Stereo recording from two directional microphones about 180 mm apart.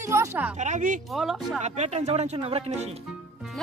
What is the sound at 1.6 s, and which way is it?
Speech, 40° right (ahead or behind).